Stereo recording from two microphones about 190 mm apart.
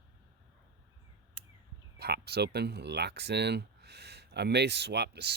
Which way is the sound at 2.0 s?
60° right (ahead or behind).